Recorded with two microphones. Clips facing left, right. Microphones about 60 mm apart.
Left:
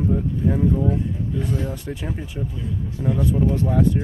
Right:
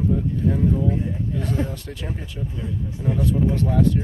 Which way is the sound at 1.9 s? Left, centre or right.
Centre.